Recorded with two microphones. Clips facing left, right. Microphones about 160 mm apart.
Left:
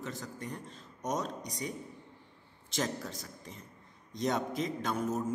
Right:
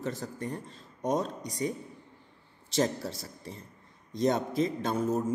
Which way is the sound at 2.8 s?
35° right (ahead or behind).